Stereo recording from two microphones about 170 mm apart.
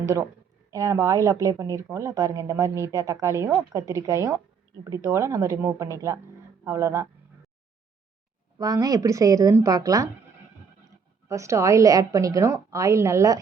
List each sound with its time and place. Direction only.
0.7 s speech: 15° right (ahead or behind)
8.5 s speech: 20° right (ahead or behind)
11.3 s speech: 15° right (ahead or behind)